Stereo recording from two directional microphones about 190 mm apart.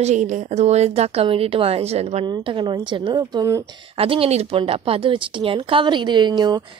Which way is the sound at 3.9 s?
30° right (ahead or behind).